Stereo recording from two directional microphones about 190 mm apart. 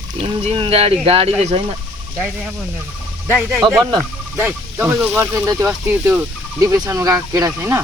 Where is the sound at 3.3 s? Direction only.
5° right (ahead or behind).